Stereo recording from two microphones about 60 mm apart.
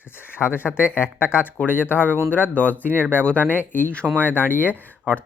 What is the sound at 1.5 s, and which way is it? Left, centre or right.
Speech, left.